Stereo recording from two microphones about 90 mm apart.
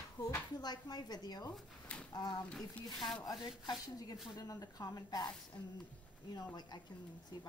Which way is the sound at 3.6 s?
50° left (ahead or behind).